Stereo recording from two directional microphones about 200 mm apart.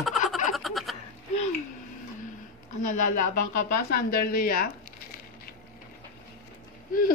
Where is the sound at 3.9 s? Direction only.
50° left (ahead or behind).